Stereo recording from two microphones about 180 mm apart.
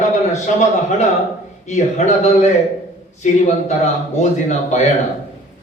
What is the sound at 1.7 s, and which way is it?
A man's voice, 40° left (ahead or behind).